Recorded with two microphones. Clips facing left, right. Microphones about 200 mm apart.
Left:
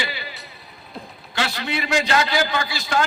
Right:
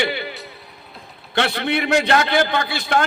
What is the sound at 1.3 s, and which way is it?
A man's voice, 60° right (ahead or behind).